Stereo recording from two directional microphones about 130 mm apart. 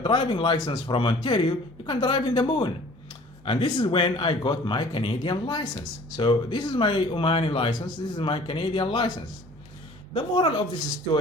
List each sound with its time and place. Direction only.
0.0 s speech: 35° left (ahead or behind)
10.2 s speech: 40° left (ahead or behind)